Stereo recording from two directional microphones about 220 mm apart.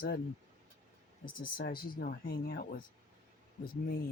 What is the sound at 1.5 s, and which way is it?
Speech, 45° left (ahead or behind).